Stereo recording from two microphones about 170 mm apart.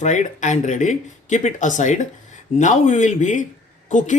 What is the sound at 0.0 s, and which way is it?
Speech, 45° left (ahead or behind).